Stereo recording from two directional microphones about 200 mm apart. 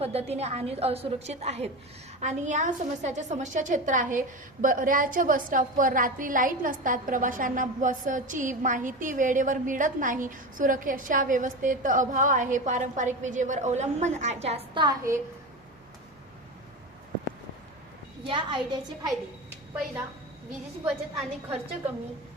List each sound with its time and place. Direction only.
0.0 s a woman's voice: 30° right (ahead or behind)
18.3 s a woman's voice: 25° right (ahead or behind)